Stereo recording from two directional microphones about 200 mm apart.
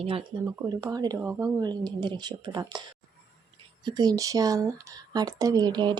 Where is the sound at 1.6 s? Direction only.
20° right (ahead or behind).